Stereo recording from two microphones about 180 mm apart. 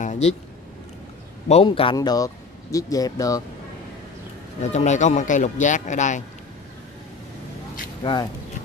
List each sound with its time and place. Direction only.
0.0 s a sound: 40° left (ahead or behind)
1.5 s speech: 30° left (ahead or behind)
4.6 s speech: 40° left (ahead or behind)
8.0 s speech: 25° left (ahead or behind)